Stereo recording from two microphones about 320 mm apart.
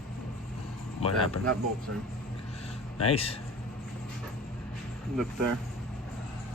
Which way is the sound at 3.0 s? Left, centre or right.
Centre.